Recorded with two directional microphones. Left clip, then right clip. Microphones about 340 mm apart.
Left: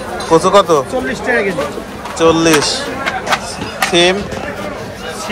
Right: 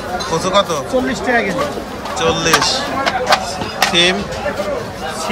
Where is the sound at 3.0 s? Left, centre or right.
Right.